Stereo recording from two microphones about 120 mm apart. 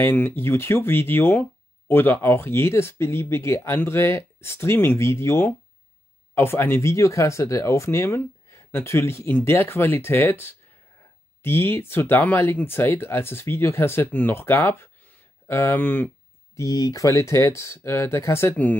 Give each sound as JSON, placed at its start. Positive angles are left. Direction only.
{"t": 0.0, "sound": "speech", "side_deg": 15}
{"t": 16.5, "sound": "speech", "side_deg": 30}